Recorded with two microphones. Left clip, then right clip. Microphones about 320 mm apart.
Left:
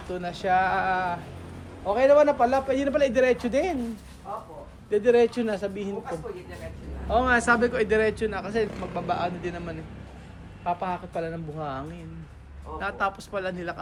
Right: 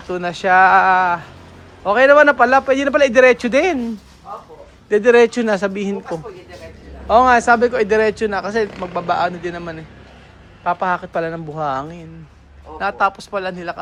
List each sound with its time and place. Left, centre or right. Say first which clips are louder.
0.1 s speech: right 10 dB; right
4.9 s speech: right 9 dB; right
7.1 s speech: right 10 dB; centre